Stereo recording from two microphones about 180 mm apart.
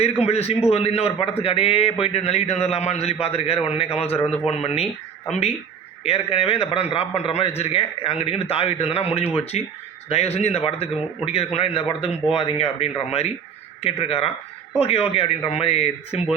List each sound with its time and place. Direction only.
0.0 s a man's voice: 35° left (ahead or behind)